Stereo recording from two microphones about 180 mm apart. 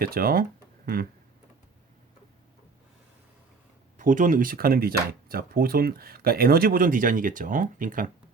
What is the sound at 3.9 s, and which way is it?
Speech, 45° right (ahead or behind).